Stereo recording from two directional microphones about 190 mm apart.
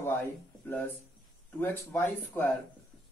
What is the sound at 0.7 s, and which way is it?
Speech, 10° left (ahead or behind).